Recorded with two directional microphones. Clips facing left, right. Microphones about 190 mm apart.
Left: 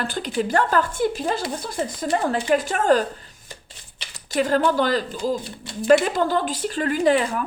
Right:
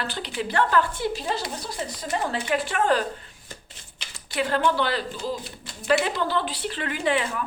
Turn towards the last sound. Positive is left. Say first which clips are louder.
# left 6 dB
turn(degrees=40)  # may be behind; listen again after turning